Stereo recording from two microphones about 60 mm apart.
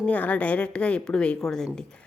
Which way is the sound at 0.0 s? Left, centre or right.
Left.